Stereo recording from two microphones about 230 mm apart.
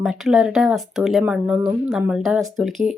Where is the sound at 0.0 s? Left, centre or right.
Centre.